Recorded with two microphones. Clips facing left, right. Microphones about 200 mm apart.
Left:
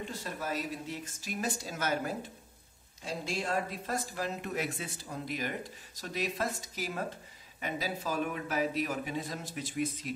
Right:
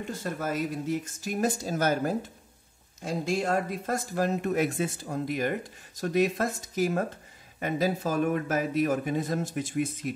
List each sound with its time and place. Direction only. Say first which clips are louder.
0.2 s speech: right 7 dB; 50° right (ahead or behind)